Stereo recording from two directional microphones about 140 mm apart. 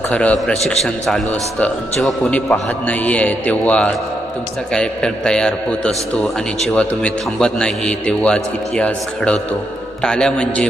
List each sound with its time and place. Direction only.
0.1 s a man's voice: 10° left (ahead or behind)